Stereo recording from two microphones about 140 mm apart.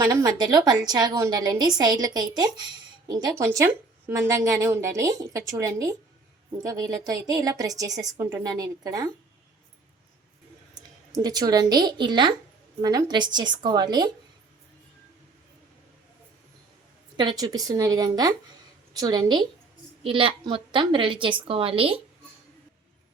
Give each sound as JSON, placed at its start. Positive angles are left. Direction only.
{"t": 0.0, "sound": "a woman's voice", "side_deg": -25}
{"t": 11.1, "sound": "a woman's voice", "side_deg": -25}
{"t": 17.2, "sound": "a woman's voice", "side_deg": -30}